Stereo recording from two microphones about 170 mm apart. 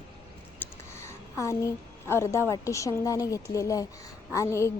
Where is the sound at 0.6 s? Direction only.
15° left (ahead or behind).